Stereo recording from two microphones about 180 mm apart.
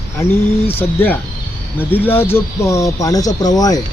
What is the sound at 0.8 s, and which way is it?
Speech, 10° left (ahead or behind).